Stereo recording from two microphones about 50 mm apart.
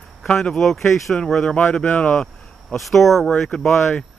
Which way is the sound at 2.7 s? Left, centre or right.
Centre.